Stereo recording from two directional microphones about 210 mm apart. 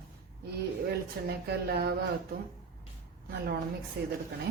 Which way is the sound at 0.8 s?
50° right (ahead or behind).